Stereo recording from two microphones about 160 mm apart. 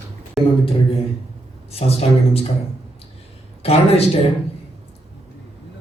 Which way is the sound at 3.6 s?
40° left (ahead or behind).